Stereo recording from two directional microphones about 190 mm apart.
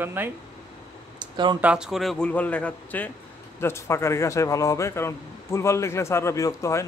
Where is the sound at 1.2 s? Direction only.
25° right (ahead or behind).